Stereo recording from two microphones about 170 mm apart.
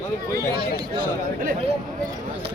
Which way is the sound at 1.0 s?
55° right (ahead or behind).